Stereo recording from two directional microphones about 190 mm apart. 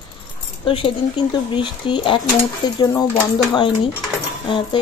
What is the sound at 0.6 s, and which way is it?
Speech, 25° left (ahead or behind).